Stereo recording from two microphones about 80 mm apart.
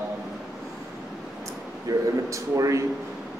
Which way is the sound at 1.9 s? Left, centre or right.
Right.